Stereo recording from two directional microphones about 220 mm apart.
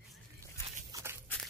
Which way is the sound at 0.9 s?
15° right (ahead or behind).